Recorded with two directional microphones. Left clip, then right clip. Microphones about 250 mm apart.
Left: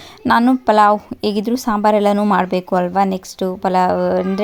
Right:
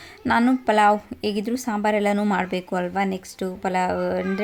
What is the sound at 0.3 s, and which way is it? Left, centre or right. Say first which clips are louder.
A woman's voice: left 6 dB; left.